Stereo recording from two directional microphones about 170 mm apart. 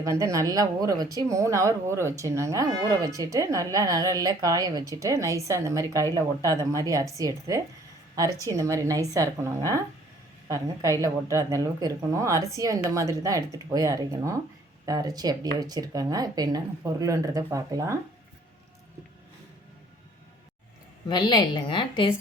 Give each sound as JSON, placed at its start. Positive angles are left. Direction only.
{"t": 0.0, "sound": "speech", "side_deg": -20}
{"t": 21.1, "sound": "a woman's voice", "side_deg": 25}